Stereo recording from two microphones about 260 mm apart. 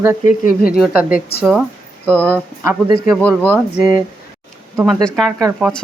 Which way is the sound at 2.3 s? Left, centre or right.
Centre.